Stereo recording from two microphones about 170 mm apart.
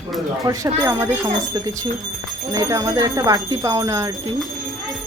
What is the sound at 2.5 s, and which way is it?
Speech, 20° right (ahead or behind).